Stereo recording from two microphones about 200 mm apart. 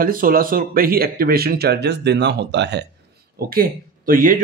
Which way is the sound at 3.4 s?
45° right (ahead or behind).